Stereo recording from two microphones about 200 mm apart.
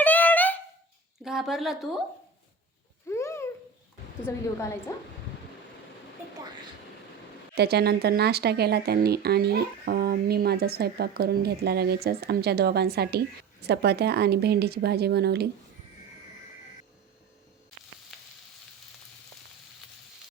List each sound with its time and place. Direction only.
0.0 s wind instrument: 10° left (ahead or behind)
1.2 s speech: centre (ahead or behind)
3.1 s a sound: 15° left (ahead or behind)
4.3 s a woman's voice: 15° left (ahead or behind)
7.5 s speech: 55° right (ahead or behind)